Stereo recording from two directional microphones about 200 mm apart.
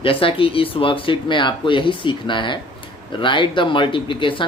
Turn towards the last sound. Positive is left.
turn(degrees=25)  # may be behind; listen again after turning